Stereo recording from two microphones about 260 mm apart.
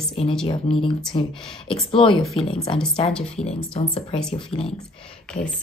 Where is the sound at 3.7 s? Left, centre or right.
Left.